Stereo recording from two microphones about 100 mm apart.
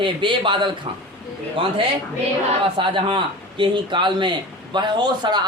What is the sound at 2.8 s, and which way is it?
Speech, 55° right (ahead or behind).